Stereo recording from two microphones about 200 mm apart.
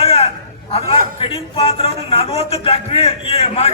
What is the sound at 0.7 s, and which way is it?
A man's voice, 25° left (ahead or behind).